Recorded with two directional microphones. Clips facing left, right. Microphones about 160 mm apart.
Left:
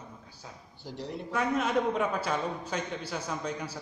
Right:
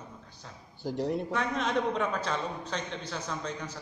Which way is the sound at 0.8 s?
45° right (ahead or behind).